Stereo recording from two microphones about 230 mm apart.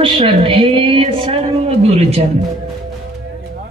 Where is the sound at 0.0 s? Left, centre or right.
Right.